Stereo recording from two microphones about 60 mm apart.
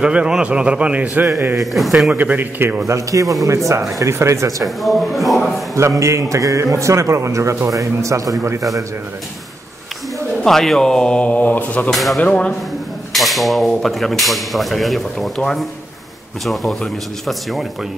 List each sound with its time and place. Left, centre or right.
0.0 s a man's voice: centre
1.2 s speech: right
1.6 s speech: centre
2.0 s a man's voice: right
2.9 s a man's voice: right
4.6 s speech: centre
5.8 s a man's voice: right
10.4 s speech: centre; by 11.9 s left
11.9 s speech: centre
12.2 s speech: centre
13.1 s speech: centre
17.3 s speech: centre